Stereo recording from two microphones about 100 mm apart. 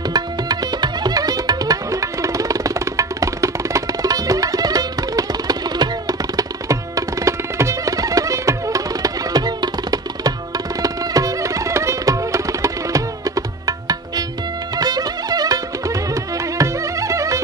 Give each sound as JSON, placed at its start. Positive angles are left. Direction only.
{"t": 0.1, "sound": "music", "side_deg": -40}
{"t": 10.8, "sound": "tabla", "side_deg": -35}
{"t": 14.8, "sound": "music", "side_deg": -40}